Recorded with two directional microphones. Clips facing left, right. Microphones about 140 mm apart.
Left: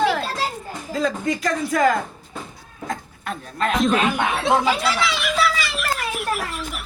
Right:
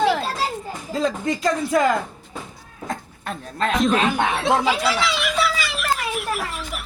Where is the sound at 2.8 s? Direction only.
30° right (ahead or behind).